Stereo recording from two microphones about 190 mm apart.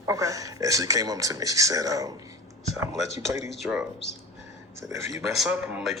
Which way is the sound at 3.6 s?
5° right (ahead or behind).